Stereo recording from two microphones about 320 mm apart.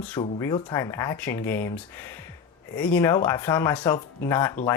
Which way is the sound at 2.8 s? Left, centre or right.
Centre.